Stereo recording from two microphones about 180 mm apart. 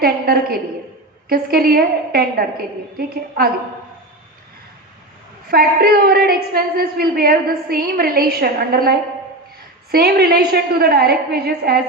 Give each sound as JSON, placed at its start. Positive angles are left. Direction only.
{"t": 0.0, "sound": "a woman's voice", "side_deg": -60}
{"t": 5.5, "sound": "a woman's voice", "side_deg": -55}
{"t": 9.9, "sound": "a woman's voice", "side_deg": -60}